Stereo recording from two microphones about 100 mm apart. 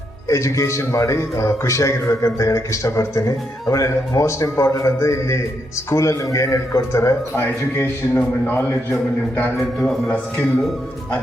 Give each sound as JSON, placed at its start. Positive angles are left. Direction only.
{"t": 0.3, "sound": "a man's voice", "side_deg": 30}
{"t": 9.7, "sound": "a man's voice", "side_deg": 0}